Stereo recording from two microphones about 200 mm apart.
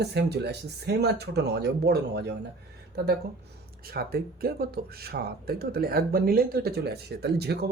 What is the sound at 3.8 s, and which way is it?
Speech, 50° right (ahead or behind).